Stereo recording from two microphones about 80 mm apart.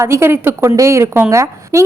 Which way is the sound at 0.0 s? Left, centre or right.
Right.